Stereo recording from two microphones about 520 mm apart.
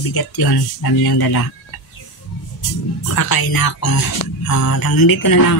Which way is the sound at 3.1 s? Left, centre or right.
Left.